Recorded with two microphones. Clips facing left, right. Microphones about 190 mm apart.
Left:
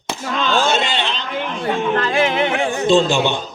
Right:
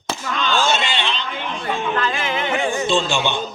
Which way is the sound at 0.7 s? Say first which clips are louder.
Left 2 dB; 40° left (ahead or behind).